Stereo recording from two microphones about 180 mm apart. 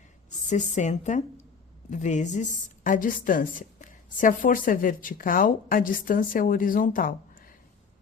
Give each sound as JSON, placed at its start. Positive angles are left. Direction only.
{"t": 0.3, "sound": "a woman's voice", "side_deg": 40}